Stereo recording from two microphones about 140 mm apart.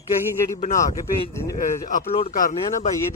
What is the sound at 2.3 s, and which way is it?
Speech, 75° left (ahead or behind).